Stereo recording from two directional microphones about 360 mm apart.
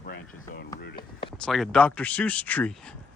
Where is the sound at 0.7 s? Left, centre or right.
Left.